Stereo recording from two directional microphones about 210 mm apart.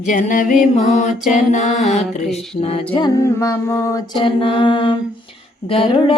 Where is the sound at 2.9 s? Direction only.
20° left (ahead or behind).